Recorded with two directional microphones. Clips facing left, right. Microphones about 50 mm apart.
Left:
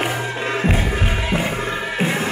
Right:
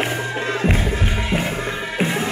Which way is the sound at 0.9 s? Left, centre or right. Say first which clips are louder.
Left 1 dB; left.